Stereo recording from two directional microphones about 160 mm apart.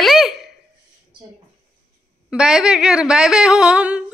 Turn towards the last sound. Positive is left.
turn(degrees=-5)  # may be behind; listen again after turning